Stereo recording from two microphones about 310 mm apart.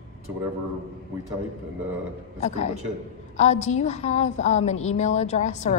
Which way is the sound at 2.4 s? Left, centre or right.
Left.